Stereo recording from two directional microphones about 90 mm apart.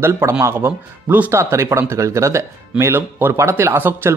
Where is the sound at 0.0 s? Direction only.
30° right (ahead or behind).